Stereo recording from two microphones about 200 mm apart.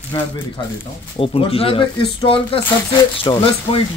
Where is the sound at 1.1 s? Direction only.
30° left (ahead or behind).